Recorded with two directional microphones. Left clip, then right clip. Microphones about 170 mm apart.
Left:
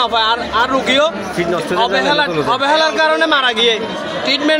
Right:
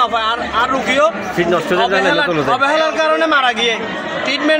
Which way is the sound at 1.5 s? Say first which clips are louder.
Right 1 dB; 35° right (ahead or behind).